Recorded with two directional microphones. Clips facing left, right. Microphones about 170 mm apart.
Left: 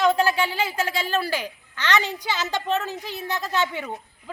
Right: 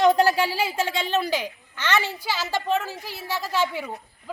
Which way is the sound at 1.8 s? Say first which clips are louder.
Left 1 dB; 15° left (ahead or behind).